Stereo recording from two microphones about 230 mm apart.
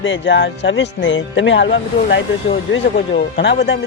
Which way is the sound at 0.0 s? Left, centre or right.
Left.